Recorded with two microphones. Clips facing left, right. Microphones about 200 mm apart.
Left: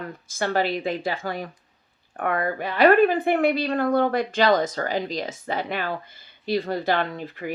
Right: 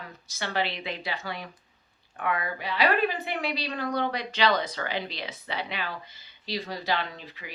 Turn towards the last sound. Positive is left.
turn(degrees=50)  # may be behind; listen again after turning